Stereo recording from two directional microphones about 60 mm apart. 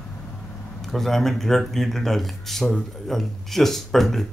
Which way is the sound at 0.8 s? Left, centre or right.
Centre.